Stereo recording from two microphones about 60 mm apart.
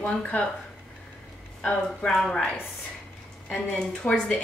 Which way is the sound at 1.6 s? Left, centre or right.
Centre.